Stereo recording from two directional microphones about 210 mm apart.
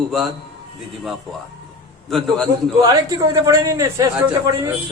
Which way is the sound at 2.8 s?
15° right (ahead or behind).